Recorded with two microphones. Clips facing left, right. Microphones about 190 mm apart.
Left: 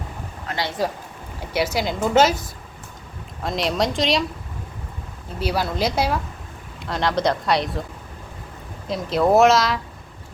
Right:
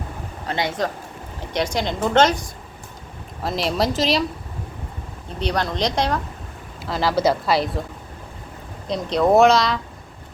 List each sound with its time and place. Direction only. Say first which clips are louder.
0.4 s speech: right 3 dB; 20° right (ahead or behind)
1.4 s a woman's voice: left 1 dB; 5° left (ahead or behind)
5.4 s a woman's voice: even; 5° left (ahead or behind)
8.9 s a woman's voice: right 1 dB; 5° left (ahead or behind)